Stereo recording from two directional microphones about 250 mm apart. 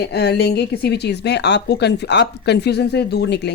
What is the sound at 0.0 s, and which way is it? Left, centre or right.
A woman's voice, left.